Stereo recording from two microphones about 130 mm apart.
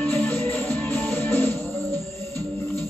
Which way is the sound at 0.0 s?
15° left (ahead or behind).